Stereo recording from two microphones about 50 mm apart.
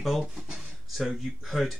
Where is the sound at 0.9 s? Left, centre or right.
Centre.